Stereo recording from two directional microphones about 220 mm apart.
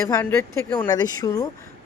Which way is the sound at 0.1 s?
10° left (ahead or behind).